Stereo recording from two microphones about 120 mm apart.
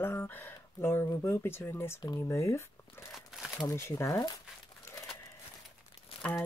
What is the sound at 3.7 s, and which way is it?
Speech, 20° left (ahead or behind).